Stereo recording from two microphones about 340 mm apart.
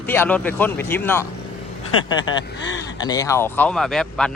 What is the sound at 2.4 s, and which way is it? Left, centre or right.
Speech, left.